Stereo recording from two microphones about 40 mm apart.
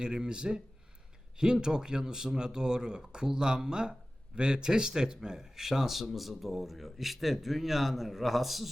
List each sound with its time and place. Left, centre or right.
0.0 s speech: right; by 8.7 s centre